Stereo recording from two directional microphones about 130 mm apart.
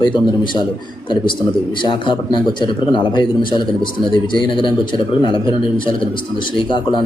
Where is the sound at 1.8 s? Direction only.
40° left (ahead or behind).